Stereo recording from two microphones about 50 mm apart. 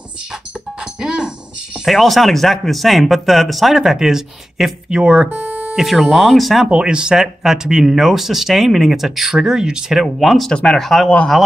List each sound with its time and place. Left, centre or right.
1.0 s jingle bell: centre
1.9 s speech: centre; by 5.8 s right
5.8 s speech: centre
6.6 s speech: centre
10.2 s speech: centre
10.5 s speech: centre